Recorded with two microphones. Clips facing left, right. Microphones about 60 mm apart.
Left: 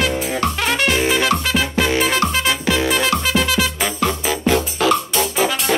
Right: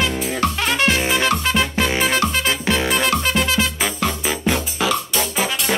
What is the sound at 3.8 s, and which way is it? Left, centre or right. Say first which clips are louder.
Music: left 2 dB; centre.